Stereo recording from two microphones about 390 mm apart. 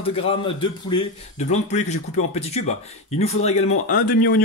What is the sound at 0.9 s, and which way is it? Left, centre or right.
Speech, centre.